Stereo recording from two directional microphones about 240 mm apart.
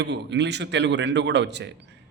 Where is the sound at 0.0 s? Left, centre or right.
Right.